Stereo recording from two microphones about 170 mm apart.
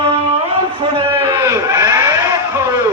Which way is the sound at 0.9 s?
20° right (ahead or behind).